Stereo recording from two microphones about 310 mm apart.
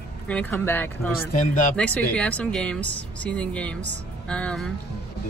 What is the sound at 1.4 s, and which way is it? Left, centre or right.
Speech, left.